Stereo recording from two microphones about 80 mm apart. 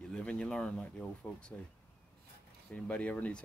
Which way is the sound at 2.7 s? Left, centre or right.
Centre.